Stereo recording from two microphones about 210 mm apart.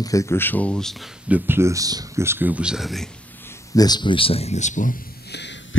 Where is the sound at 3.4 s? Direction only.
20° left (ahead or behind); by 5.8 s 55° left (ahead or behind).